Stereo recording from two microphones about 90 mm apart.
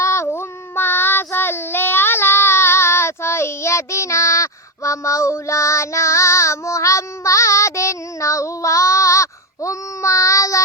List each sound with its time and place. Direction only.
0.0 s child singing: 30° left (ahead or behind)